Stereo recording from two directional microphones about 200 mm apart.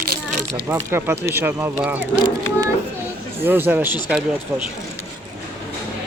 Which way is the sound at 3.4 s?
10° right (ahead or behind).